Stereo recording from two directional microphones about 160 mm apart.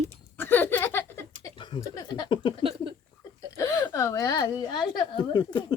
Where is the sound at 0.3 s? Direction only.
15° left (ahead or behind).